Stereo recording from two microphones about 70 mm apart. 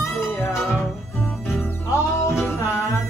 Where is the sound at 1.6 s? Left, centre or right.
Left.